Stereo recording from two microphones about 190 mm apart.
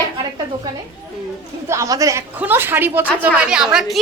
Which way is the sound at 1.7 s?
15° right (ahead or behind).